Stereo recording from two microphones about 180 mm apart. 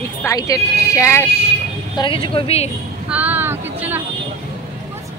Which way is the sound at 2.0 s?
30° left (ahead or behind).